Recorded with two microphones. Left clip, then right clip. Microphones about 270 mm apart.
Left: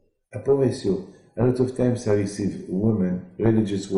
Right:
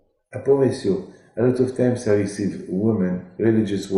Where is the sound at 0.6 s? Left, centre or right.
Centre.